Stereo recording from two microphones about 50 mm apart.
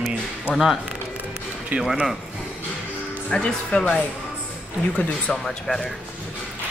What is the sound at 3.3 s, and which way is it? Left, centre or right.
Speech, centre.